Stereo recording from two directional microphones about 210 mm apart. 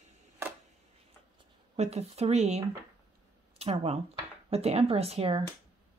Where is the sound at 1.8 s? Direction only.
30° right (ahead or behind).